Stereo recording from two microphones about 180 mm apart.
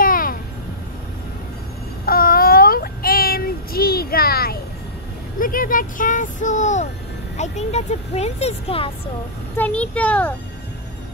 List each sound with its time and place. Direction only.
0.0 s vehicle: 50° left (ahead or behind)
2.0 s child singing: 55° left (ahead or behind)
5.4 s a sound: 50° left (ahead or behind)
7.3 s speech: 40° left (ahead or behind)
9.6 s a child's voice: 5° left (ahead or behind)